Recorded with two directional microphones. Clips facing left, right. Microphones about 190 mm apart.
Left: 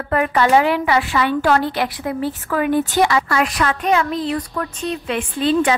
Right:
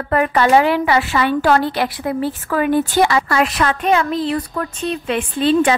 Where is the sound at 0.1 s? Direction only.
35° right (ahead or behind).